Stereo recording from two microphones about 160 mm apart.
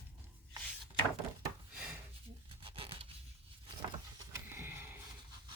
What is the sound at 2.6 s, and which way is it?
Tearing, 35° right (ahead or behind).